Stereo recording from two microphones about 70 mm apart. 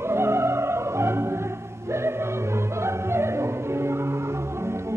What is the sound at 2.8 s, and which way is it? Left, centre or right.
Music, right.